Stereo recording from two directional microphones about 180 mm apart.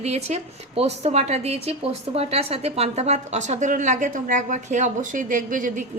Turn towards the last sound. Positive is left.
turn(degrees=-50)  # may be behind; listen again after turning